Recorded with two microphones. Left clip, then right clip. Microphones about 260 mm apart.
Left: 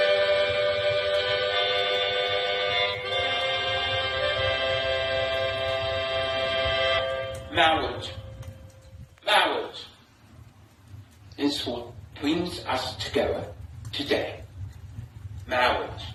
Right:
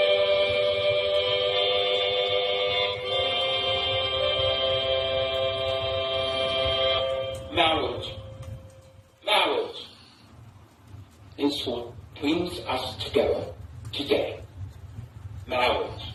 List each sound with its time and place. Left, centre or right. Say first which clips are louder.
0.0 s music: even; left
7.8 s a man's voice: right 1 dB; left
9.2 s a sound: left 1 dB; left
11.5 s a man's voice: right 1 dB; left
13.9 s speech: right 1 dB; left
15.4 s a sound: left 1 dB; left